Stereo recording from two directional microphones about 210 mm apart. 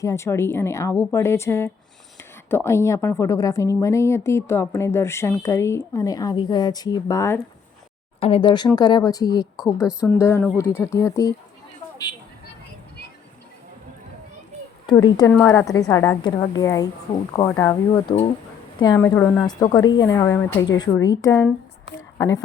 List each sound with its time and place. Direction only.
0.0 s a woman's voice: 15° left (ahead or behind)
9.8 s speech: 5° right (ahead or behind)
10.2 s a woman's voice: 10° left (ahead or behind)
15.0 s a woman's voice: 20° left (ahead or behind)